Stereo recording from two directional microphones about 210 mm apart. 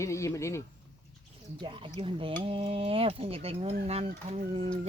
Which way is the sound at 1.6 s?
25° right (ahead or behind).